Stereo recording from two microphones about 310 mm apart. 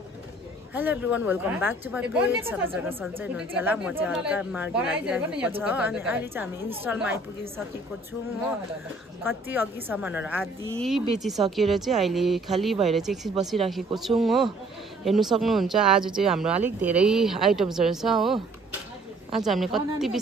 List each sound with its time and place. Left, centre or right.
0.7 s a woman's voice: centre
9.2 s a woman's voice: centre